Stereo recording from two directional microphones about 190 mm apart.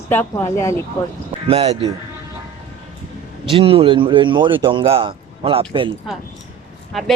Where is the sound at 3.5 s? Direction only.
30° right (ahead or behind).